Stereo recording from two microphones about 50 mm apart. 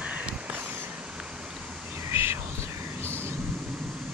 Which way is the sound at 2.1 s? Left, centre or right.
Right.